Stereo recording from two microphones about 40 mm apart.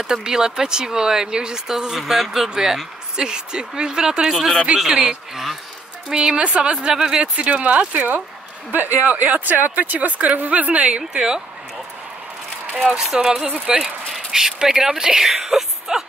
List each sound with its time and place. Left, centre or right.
0.0 s speech: centre
6.1 s a woman's voice: right
7.3 s speech: right
8.7 s speech: right
11.1 s a woman's voice: centre
12.9 s speech: centre